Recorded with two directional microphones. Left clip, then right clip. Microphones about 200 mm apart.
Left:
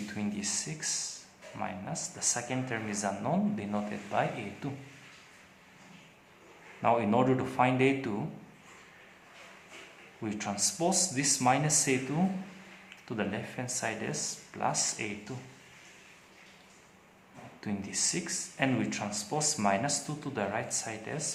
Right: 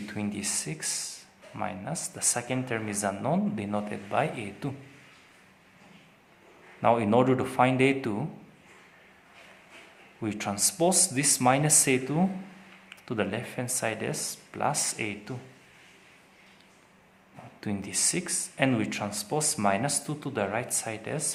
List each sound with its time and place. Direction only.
0.1 s speech: 35° right (ahead or behind)
6.8 s speech: 40° right (ahead or behind)
10.2 s speech: 40° right (ahead or behind)
13.1 s speech: 35° right (ahead or behind)
17.6 s speech: 40° right (ahead or behind)